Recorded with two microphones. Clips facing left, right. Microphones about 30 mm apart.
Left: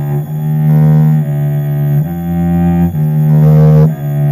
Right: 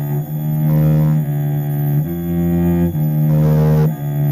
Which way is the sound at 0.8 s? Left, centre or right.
Left.